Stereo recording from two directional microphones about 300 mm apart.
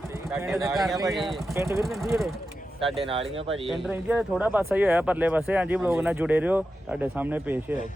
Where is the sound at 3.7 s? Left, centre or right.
Centre.